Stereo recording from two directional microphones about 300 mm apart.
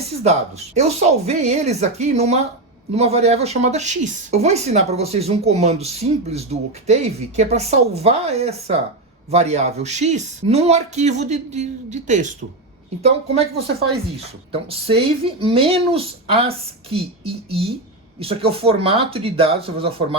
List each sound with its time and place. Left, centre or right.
0.2 s speech: right
14.5 s speech: centre